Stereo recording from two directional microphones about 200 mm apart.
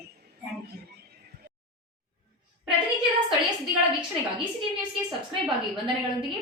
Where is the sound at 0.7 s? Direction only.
55° right (ahead or behind).